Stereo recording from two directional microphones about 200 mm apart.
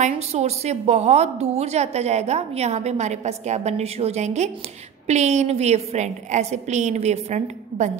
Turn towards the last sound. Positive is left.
turn(degrees=-35)  # may be behind; listen again after turning